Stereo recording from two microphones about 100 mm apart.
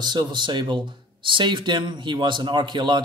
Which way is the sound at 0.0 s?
50° right (ahead or behind).